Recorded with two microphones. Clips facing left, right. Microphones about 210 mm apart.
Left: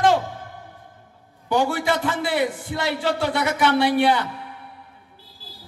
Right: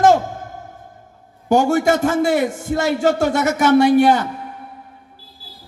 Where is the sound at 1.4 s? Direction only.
45° right (ahead or behind).